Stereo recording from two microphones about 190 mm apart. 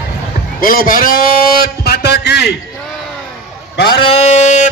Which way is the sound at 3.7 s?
60° left (ahead or behind).